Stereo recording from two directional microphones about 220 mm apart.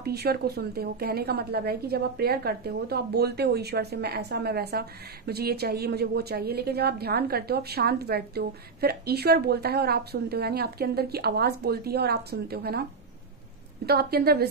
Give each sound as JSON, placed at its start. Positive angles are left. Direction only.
{"t": 0.0, "sound": "a woman's voice", "side_deg": -45}
{"t": 13.8, "sound": "a woman's voice", "side_deg": -45}